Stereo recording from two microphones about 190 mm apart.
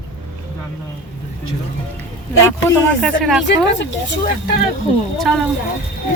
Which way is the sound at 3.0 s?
Centre (ahead or behind).